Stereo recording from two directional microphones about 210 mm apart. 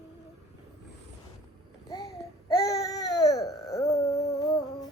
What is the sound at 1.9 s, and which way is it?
Babbling, 20° left (ahead or behind).